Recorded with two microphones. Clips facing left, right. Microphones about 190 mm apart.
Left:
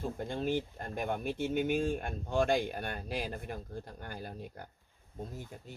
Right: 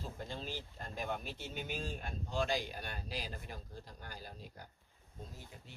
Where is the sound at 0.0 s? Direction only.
55° left (ahead or behind).